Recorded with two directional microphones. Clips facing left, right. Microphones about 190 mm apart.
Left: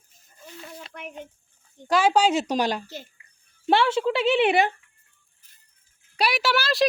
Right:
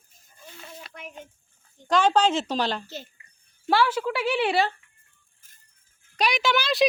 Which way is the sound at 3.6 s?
25° left (ahead or behind).